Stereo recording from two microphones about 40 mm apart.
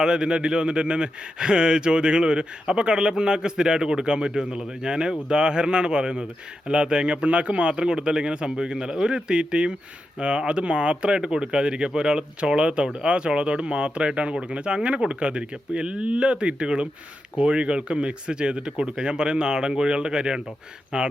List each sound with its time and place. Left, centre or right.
0.0 s speech: centre